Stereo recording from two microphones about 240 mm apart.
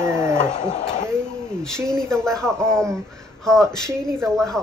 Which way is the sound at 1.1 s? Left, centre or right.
Centre.